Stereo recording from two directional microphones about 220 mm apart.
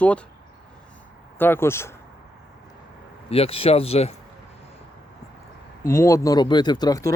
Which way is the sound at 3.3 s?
25° left (ahead or behind).